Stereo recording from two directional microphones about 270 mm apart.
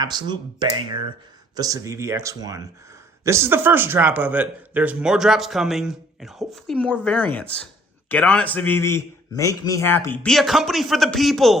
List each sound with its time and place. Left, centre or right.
0.0 s speech: centre